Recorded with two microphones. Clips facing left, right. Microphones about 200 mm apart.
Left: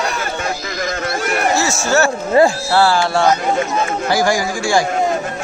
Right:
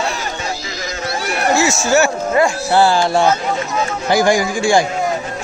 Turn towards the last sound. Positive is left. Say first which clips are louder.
# right 2 dB
turn(degrees=-20)  # may be behind; listen again after turning